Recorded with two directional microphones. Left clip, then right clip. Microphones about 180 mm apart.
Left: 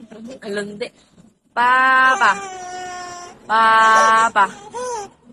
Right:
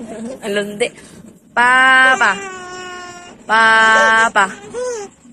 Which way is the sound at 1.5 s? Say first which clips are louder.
Right 4 dB; 25° right (ahead or behind).